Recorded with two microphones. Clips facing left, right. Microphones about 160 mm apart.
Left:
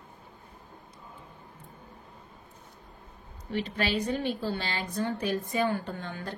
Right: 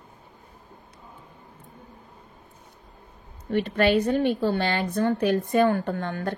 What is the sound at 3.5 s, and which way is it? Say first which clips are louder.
A woman's voice: right 9 dB; 55° right (ahead or behind).